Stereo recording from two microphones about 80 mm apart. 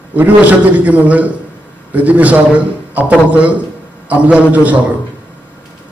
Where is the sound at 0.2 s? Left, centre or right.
Right.